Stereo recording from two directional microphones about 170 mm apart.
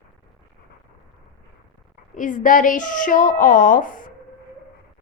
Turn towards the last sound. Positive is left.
turn(degrees=50)  # may be behind; listen again after turning